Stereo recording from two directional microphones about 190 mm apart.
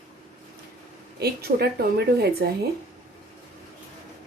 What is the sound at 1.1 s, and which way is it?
Speech, 55° right (ahead or behind).